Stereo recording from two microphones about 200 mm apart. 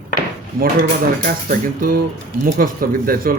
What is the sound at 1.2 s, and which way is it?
Speech, 45° right (ahead or behind).